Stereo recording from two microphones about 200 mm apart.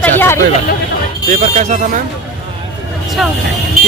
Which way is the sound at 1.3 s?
35° right (ahead or behind).